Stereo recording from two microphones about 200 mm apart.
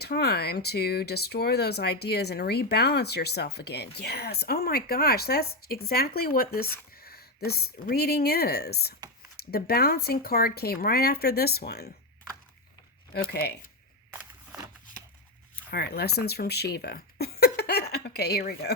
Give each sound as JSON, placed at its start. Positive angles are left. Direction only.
{"t": 0.0, "sound": "speech", "side_deg": 55}
{"t": 13.1, "sound": "speech", "side_deg": 50}
{"t": 15.7, "sound": "speech", "side_deg": 55}